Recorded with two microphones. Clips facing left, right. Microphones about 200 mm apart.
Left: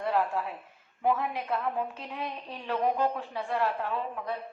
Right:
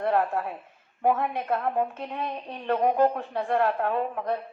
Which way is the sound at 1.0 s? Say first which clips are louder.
Right 4 dB; 55° right (ahead or behind).